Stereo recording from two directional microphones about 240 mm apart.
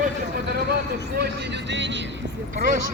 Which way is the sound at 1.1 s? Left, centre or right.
Right.